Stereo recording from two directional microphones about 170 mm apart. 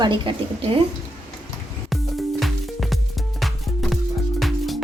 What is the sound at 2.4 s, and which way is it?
Music, centre (ahead or behind).